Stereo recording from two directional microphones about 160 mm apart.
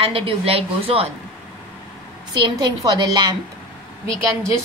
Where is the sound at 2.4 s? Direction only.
25° right (ahead or behind).